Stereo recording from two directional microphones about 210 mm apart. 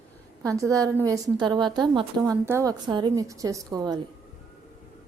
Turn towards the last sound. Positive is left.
turn(degrees=-20)  # may be behind; listen again after turning